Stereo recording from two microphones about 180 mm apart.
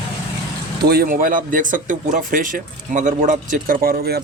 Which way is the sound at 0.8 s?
55° right (ahead or behind).